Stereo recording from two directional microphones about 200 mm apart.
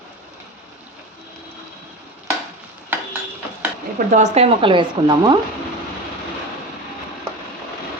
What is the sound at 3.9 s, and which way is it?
Speech, 35° right (ahead or behind).